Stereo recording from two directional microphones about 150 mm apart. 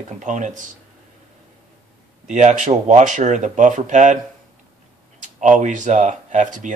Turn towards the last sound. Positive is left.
turn(degrees=-55)  # may be behind; listen again after turning